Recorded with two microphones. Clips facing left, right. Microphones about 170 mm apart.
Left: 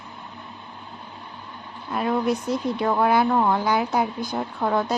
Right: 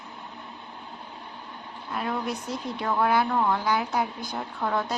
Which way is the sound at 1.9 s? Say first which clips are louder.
Left 7 dB; 20° left (ahead or behind).